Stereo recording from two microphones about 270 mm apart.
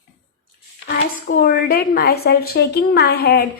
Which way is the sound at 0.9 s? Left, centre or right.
Left.